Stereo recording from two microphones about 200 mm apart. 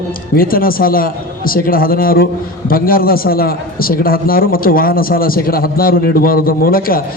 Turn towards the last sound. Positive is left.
turn(degrees=45)  # may be behind; listen again after turning